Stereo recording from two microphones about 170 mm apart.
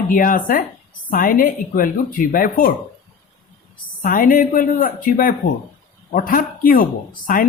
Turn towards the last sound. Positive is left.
turn(degrees=50)  # may be behind; listen again after turning